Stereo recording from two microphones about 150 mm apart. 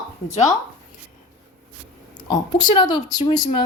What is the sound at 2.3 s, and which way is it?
Speech, 30° left (ahead or behind).